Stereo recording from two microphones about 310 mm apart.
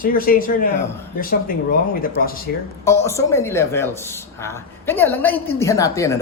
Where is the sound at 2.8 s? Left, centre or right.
Centre.